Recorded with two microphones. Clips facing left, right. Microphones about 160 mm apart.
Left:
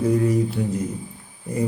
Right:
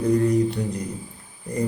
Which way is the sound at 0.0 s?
5° left (ahead or behind).